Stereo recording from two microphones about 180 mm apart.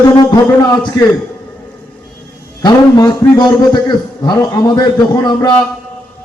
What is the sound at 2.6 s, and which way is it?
A man's voice, 20° left (ahead or behind).